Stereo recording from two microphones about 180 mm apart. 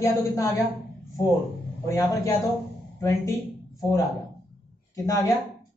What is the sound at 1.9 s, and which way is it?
Speech, 20° left (ahead or behind).